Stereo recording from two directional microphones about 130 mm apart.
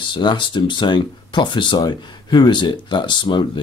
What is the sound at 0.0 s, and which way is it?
Speech, 35° left (ahead or behind).